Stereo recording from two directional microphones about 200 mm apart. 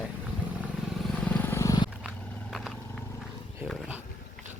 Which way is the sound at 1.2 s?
5° left (ahead or behind).